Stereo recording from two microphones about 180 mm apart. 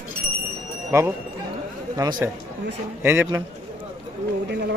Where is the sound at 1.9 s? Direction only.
20° right (ahead or behind).